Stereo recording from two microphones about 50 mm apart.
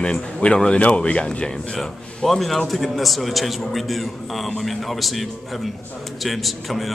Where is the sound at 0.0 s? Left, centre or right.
Centre.